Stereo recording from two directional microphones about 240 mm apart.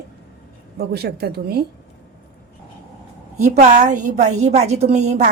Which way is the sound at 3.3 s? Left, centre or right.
Right.